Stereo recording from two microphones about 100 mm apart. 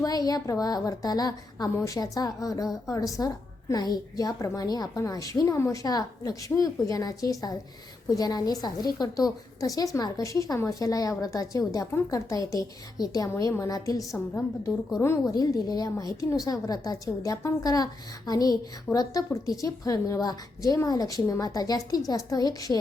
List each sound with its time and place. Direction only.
0.0 s a woman's voice: 40° left (ahead or behind)
14.7 s a woman's voice: centre (ahead or behind)
15.3 s a woman's voice: 40° left (ahead or behind)